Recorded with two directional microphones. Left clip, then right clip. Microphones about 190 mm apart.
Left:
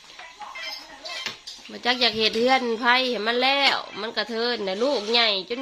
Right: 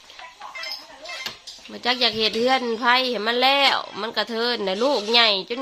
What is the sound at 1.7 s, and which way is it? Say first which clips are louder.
A woman's voice: right 1 dB; 15° right (ahead or behind).